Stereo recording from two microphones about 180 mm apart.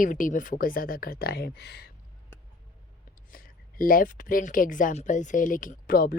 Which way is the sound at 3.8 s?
50° left (ahead or behind).